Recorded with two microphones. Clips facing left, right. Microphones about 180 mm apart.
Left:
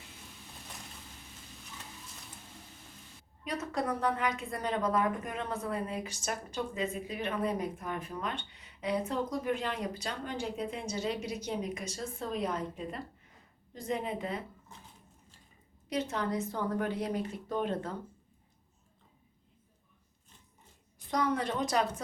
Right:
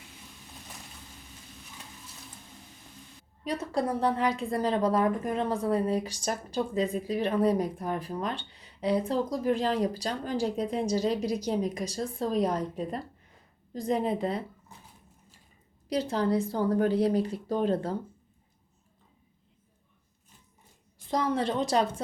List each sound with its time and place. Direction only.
3.4 s a woman's voice: 30° right (ahead or behind)
15.9 s a woman's voice: 35° right (ahead or behind)
21.1 s a woman's voice: 30° right (ahead or behind)